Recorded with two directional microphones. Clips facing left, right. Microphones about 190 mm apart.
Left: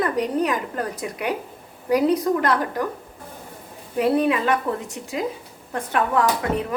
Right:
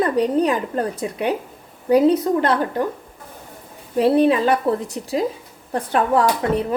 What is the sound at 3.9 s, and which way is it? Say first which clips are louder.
A woman's voice: right 4 dB; 30° right (ahead or behind).